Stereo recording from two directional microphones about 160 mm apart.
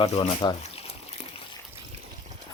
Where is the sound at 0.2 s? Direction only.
30° left (ahead or behind).